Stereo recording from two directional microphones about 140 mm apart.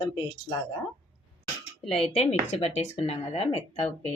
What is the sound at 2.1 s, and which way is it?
Speech, 50° left (ahead or behind).